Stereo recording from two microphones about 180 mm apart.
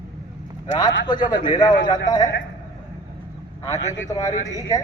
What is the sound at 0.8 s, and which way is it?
Speech, 25° left (ahead or behind).